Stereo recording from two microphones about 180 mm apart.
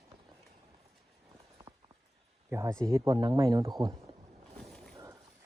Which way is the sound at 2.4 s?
15° right (ahead or behind).